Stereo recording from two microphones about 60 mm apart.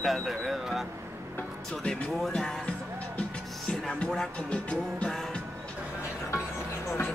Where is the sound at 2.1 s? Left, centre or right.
Centre.